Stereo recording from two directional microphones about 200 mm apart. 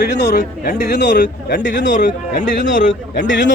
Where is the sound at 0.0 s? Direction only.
60° left (ahead or behind).